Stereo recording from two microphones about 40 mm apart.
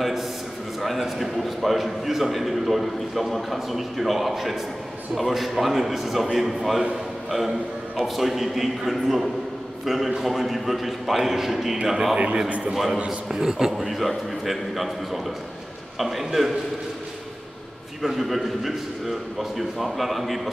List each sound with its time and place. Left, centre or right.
0.7 s a man's voice: centre
12.4 s a man's voice: right
12.7 s a man's voice: centre
18.0 s a man's voice: centre